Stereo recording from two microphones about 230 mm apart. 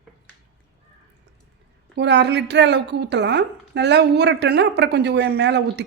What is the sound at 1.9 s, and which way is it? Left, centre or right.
A woman's voice, right.